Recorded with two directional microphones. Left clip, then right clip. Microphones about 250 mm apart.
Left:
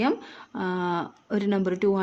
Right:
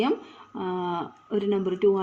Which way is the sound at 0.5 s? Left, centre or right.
Left.